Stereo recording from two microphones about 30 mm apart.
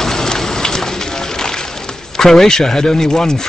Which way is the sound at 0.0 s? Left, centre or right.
Centre.